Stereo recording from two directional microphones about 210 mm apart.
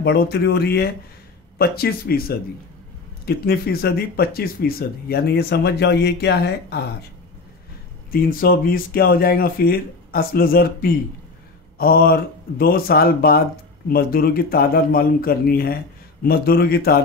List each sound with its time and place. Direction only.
0.0 s speech: 50° left (ahead or behind)
8.1 s speech: 45° left (ahead or behind)